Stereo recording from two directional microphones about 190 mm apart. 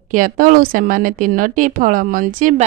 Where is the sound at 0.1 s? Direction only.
45° right (ahead or behind).